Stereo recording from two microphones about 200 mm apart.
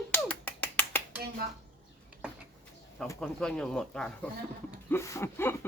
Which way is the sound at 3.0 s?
5° left (ahead or behind).